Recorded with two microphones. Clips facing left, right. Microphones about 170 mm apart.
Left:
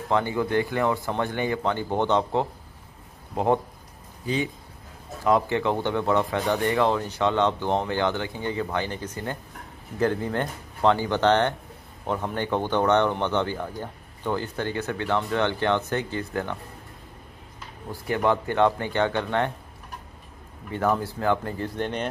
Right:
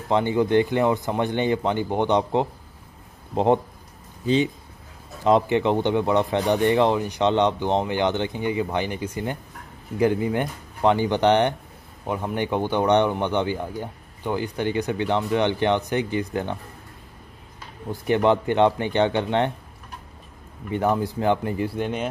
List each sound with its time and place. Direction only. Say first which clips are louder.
0.1 s speech: right 4 dB; 20° right (ahead or behind)
5.2 s speech: right 3 dB; 20° right (ahead or behind)
17.9 s speech: right 4 dB; 20° right (ahead or behind)
20.7 s speech: right 2 dB; 20° right (ahead or behind)